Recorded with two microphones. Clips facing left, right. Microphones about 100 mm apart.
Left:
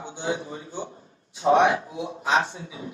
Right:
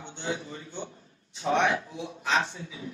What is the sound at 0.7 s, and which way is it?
A man's voice, 40° left (ahead or behind).